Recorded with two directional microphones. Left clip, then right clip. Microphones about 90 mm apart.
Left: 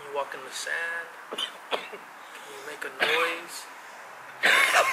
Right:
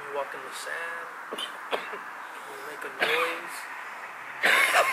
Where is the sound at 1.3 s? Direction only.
10° right (ahead or behind).